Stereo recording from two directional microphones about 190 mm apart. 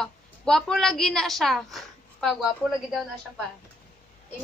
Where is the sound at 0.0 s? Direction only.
5° left (ahead or behind).